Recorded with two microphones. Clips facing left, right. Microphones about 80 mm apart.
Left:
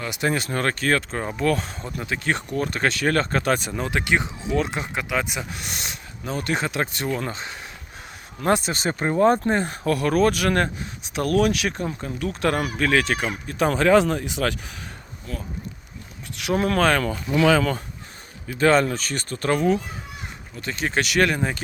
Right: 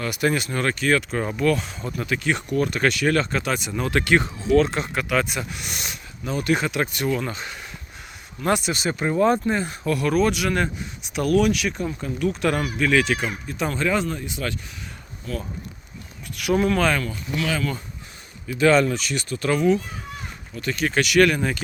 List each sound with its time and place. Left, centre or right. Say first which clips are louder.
0.0 s speech: right 2 dB; left
3.7 s speech: right 3 dB; left
5.5 s speech: even; left
13.2 s speech: left 3 dB; left
13.7 s speech: left 6 dB; left
16.6 s speech: left 1 dB; left
17.4 s speech: left 8 dB; left
18.4 s speech: right 1 dB; left
20.6 s speech: right 2 dB; left